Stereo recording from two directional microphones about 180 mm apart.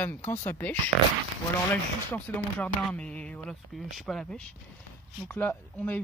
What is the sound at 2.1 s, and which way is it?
Speech, 5° left (ahead or behind).